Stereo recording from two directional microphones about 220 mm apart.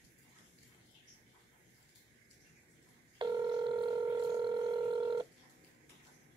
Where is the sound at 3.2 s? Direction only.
20° right (ahead or behind).